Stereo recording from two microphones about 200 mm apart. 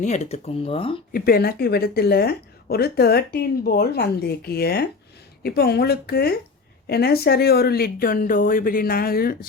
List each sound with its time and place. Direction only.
0.0 s speech: 35° left (ahead or behind)
1.1 s a woman's voice: 50° left (ahead or behind)